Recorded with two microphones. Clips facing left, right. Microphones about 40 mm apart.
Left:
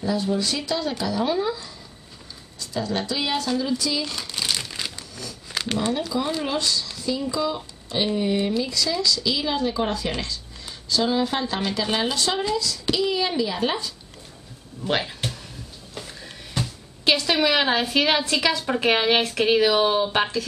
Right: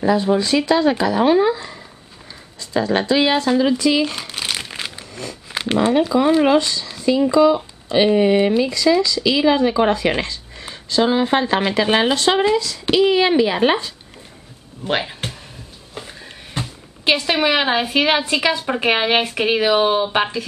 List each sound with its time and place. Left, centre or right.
0.0 s speech: right
2.7 s speech: right
3.4 s crumpling: right
5.5 s a sound: right
5.8 s speech: right
6.6 s speech: right
7.3 s speech: right
9.2 s speech: right
14.9 s speech: right